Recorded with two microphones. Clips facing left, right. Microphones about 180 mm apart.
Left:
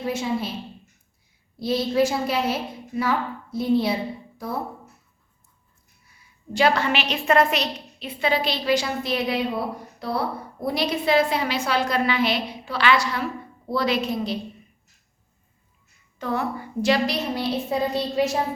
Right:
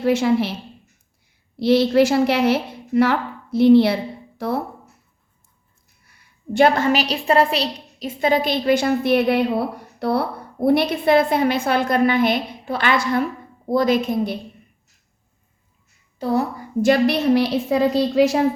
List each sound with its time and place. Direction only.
0.0 s a woman's voice: 80° right
1.5 s a woman's voice: 75° right (ahead or behind)
6.1 s a woman's voice: 65° right (ahead or behind); by 14.3 s 50° right (ahead or behind)
16.1 s a woman's voice: 35° right (ahead or behind); by 18.3 s 90° right